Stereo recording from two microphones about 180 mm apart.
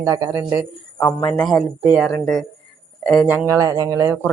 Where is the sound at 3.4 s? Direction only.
20° right (ahead or behind).